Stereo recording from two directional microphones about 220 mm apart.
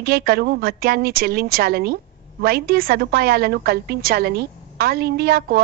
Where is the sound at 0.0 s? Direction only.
45° right (ahead or behind).